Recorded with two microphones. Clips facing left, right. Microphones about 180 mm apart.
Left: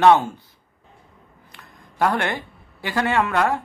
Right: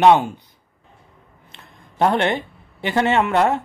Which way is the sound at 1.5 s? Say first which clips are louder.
Right 1 dB; 25° right (ahead or behind).